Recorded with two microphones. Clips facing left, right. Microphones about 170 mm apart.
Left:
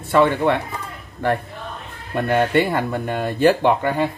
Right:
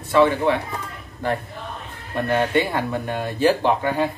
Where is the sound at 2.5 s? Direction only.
50° left (ahead or behind).